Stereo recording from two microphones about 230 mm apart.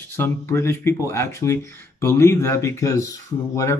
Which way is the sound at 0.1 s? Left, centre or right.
Centre.